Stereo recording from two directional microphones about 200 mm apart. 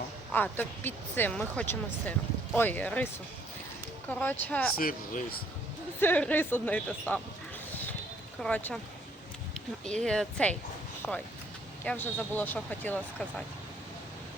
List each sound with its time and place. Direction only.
0.3 s speech: 10° left (ahead or behind)
4.2 s speech: 10° left (ahead or behind)
4.8 s speech: 45° left (ahead or behind)
6.0 s speech: 10° left (ahead or behind)
7.7 s a sound: 10° left (ahead or behind)
8.4 s speech: 5° left (ahead or behind)
9.8 s speech: 5° left (ahead or behind)